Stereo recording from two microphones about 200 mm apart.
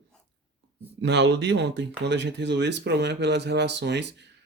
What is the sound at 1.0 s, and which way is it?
Speech, 60° right (ahead or behind).